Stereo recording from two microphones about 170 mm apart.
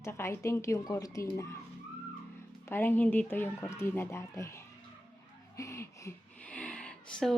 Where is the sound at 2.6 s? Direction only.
15° left (ahead or behind).